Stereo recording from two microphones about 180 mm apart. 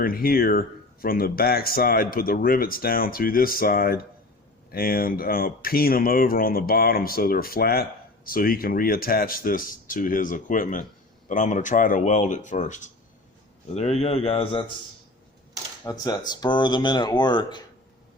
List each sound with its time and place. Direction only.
0.0 s speech: 55° left (ahead or behind); by 14.6 s 35° left (ahead or behind)
15.8 s speech: 20° left (ahead or behind)